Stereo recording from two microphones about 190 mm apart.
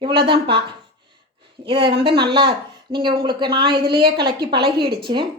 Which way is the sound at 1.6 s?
30° right (ahead or behind).